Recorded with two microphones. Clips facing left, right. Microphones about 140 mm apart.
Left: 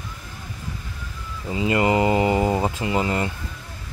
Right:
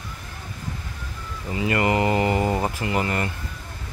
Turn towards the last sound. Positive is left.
turn(degrees=20)  # may be behind; listen again after turning